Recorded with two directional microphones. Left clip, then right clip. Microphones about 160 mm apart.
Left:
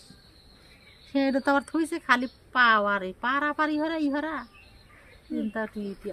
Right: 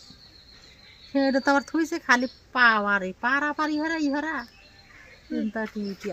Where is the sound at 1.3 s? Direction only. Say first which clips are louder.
Right 2 dB; 40° right (ahead or behind).